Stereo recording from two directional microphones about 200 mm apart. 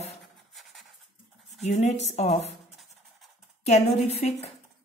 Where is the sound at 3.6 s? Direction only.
30° left (ahead or behind).